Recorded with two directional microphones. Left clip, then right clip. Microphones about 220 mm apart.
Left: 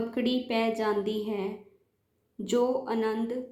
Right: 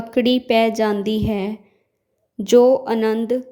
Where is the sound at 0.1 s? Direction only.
50° right (ahead or behind).